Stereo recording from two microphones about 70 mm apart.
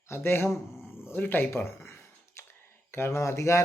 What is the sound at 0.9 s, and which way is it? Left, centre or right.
Speech, left.